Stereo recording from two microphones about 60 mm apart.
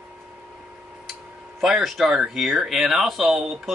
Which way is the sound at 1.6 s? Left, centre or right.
Centre.